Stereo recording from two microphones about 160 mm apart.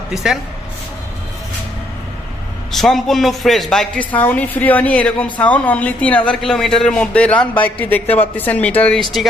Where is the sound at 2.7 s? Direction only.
Centre (ahead or behind).